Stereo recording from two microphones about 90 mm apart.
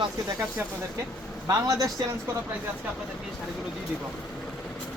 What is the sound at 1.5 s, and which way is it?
Speech, 40° right (ahead or behind).